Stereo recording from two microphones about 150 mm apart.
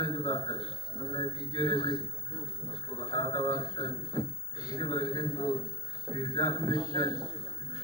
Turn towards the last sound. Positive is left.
turn(degrees=25)  # may be behind; listen again after turning